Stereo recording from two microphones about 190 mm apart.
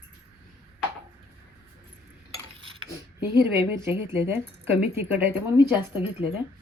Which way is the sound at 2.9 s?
15° right (ahead or behind).